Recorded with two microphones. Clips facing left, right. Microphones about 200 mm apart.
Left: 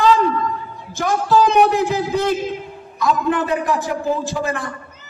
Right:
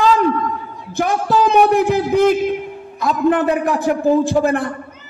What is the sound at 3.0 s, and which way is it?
A woman's voice, 55° right (ahead or behind).